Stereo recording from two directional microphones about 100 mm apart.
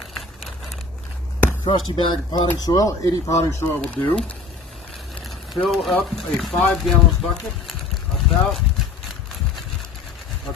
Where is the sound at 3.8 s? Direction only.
10° left (ahead or behind).